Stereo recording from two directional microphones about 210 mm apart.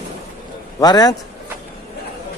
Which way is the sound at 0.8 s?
20° left (ahead or behind).